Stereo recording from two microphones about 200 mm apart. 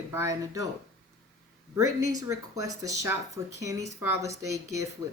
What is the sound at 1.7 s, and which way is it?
Speech, 15° right (ahead or behind).